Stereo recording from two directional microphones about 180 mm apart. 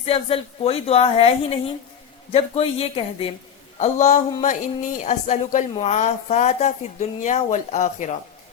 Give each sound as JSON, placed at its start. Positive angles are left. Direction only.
{"t": 0.0, "sound": "speech", "side_deg": 30}
{"t": 3.8, "sound": "speech", "side_deg": 40}